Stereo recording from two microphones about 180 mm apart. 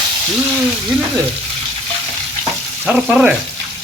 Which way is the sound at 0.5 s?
Centre (ahead or behind).